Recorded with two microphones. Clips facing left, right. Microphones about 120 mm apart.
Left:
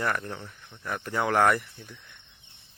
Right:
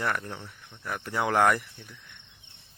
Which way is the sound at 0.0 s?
5° right (ahead or behind).